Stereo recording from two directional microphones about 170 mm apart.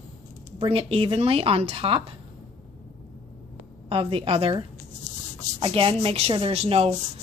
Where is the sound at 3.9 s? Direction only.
30° right (ahead or behind).